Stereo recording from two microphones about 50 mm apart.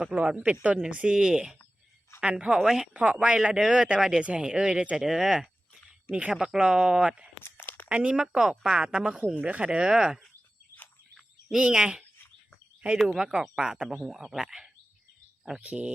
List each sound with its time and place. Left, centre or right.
0.0 s speech: right
2.6 s speech: centre
2.9 s speech: right; by 5.5 s centre
6.1 s speech: right
6.3 s speech: centre
7.5 s a sound: left
7.9 s speech: right
8.4 s speech: centre
9.3 s speech: right
11.5 s speech: centre
13.1 s speech: centre